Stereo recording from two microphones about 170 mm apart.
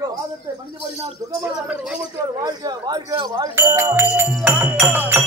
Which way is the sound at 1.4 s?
5° right (ahead or behind).